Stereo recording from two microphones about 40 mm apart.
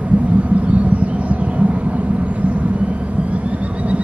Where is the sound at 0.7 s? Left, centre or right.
Right.